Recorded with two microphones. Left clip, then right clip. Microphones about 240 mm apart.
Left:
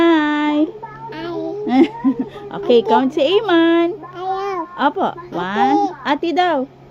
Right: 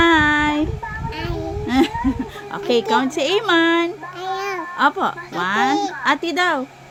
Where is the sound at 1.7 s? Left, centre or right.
Right.